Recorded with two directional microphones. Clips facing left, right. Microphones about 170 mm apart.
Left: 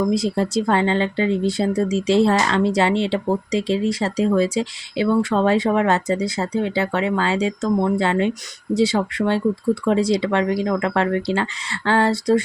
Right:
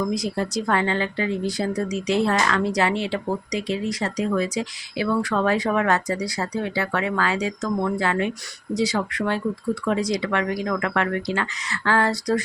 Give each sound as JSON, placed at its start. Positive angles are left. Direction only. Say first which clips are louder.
{"t": 0.0, "sound": "speech", "louder": "left 5 dB", "side_deg": 30}